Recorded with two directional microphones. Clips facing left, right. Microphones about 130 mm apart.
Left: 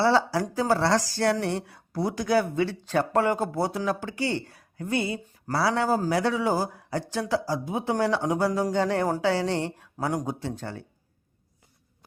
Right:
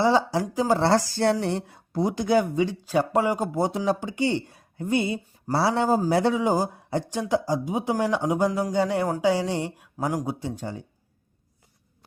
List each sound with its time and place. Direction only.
0.0 s speech: 15° right (ahead or behind)